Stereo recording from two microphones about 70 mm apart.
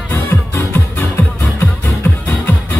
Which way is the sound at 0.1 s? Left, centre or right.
Left.